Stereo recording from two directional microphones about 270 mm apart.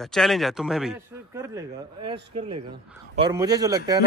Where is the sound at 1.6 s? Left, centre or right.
Centre.